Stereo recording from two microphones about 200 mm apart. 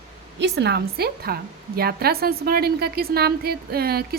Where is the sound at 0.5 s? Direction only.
55° right (ahead or behind).